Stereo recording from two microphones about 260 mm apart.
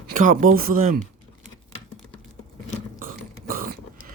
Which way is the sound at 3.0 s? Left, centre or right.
Right.